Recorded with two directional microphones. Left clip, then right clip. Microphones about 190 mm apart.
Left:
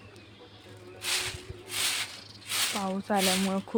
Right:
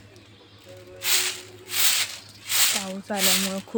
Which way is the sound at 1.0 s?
50° right (ahead or behind).